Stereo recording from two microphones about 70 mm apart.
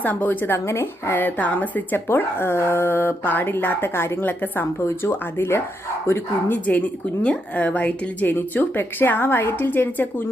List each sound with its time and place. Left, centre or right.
0.0 s speech: left
4.8 s speech: left